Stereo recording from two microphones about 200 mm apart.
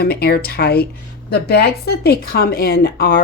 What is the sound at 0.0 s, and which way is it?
Speech, 50° left (ahead or behind).